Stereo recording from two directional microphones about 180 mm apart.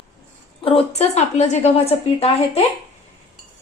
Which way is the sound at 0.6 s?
35° left (ahead or behind).